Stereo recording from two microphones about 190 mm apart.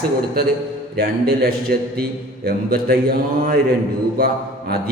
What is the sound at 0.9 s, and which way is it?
A man's voice, 55° right (ahead or behind).